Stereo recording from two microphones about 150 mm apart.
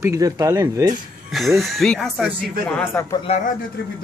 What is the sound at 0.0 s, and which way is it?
Speech, 20° right (ahead or behind).